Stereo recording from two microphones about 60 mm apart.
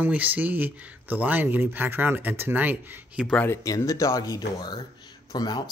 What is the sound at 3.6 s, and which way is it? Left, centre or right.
Speech, left.